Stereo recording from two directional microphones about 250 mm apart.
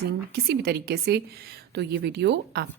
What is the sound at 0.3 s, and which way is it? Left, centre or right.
A woman's voice, right.